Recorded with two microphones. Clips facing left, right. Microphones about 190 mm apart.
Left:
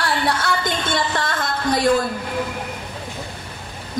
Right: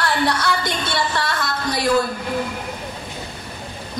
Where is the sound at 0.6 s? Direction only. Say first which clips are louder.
Left 1 dB; 50° left (ahead or behind).